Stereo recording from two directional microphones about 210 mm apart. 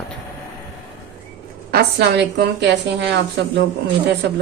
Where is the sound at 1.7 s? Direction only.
50° right (ahead or behind).